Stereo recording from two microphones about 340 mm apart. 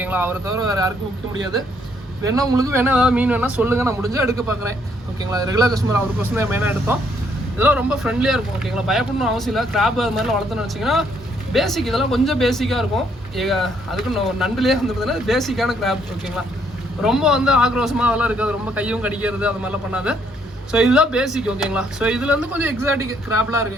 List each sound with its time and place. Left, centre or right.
0.0 s speech: centre
2.2 s speech: centre